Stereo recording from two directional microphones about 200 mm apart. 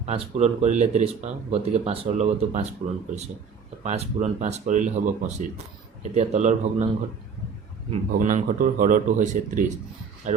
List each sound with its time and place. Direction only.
0.0 s speech: 35° right (ahead or behind)
3.8 s speech: 35° right (ahead or behind)
7.9 s speech: 40° right (ahead or behind)